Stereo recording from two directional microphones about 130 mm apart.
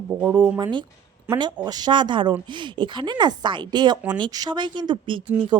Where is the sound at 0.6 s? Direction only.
35° right (ahead or behind).